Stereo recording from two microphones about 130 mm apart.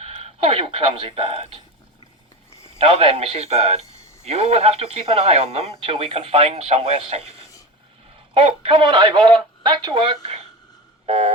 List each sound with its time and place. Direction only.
0.2 s speech: 50° right (ahead or behind)
2.7 s speech: 45° right (ahead or behind)
8.3 s speech: 45° right (ahead or behind)